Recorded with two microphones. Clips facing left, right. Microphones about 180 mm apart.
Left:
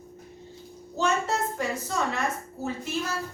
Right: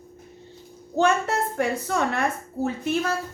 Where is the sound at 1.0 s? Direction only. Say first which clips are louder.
Right 5 dB; 60° right (ahead or behind).